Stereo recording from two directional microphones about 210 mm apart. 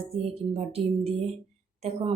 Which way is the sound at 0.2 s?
30° right (ahead or behind).